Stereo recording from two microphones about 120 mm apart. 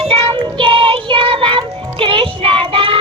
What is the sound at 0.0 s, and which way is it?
Child singing, 50° right (ahead or behind).